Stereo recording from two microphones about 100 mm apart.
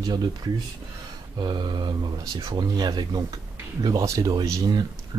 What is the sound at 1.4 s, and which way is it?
Speech, 50° right (ahead or behind).